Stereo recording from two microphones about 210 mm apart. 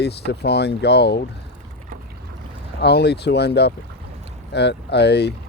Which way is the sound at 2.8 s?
50° left (ahead or behind).